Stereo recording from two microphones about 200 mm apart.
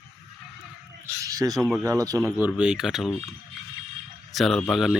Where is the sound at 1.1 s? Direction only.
15° right (ahead or behind).